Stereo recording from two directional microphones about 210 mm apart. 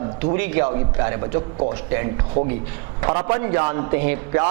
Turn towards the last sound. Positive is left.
turn(degrees=-15)  # may be behind; listen again after turning